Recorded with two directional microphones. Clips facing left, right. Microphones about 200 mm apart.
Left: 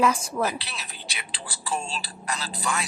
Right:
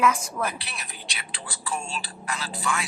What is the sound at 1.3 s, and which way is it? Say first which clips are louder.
A woman's voice: left 2 dB; 35° left (ahead or behind).